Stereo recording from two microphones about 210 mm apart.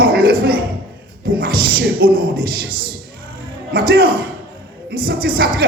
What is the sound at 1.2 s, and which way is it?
Speech, 45° right (ahead or behind).